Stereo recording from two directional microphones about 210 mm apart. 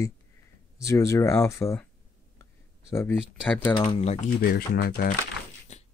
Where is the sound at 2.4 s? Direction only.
10° left (ahead or behind).